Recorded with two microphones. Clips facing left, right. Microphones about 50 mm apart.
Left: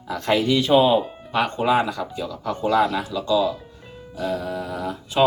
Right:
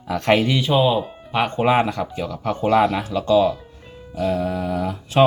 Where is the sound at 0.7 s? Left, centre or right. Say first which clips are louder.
Left 2 dB; centre.